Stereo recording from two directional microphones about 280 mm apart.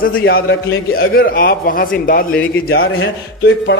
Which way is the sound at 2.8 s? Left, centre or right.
Left.